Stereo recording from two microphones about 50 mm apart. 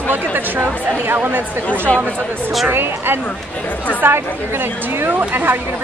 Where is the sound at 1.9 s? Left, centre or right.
Left.